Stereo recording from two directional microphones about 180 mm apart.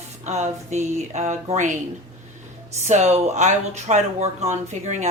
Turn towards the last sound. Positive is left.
turn(degrees=-40)  # may be behind; listen again after turning